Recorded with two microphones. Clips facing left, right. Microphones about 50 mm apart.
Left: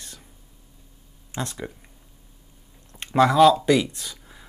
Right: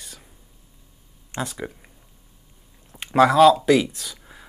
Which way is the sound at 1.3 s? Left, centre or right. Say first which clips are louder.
Right 2 dB; centre.